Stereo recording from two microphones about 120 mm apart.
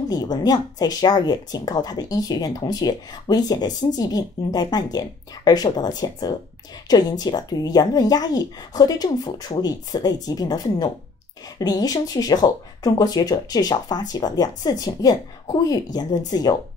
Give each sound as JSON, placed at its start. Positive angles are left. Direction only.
{"t": 0.1, "sound": "speech", "side_deg": 35}